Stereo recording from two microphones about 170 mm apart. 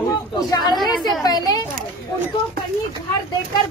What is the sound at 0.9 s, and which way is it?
Speech, centre (ahead or behind).